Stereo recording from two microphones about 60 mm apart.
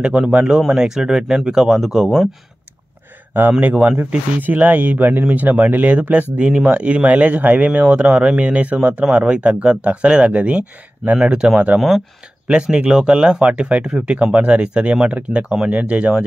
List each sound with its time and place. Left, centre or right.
0.1 s speech: centre
3.6 s speech: right